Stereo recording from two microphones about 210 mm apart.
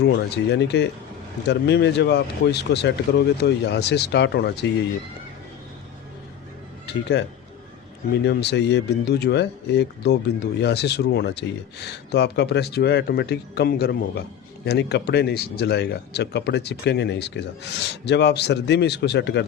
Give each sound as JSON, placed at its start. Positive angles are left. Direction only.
{"t": 0.0, "sound": "speech", "side_deg": 55}
{"t": 6.8, "sound": "speech", "side_deg": 55}